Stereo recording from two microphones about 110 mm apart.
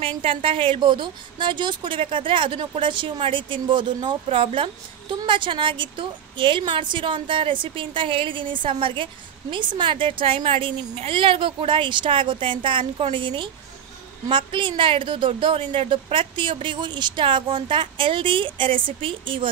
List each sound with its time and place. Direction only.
0.2 s a woman's voice: 55° right (ahead or behind)
4.3 s a woman's voice: 55° right (ahead or behind)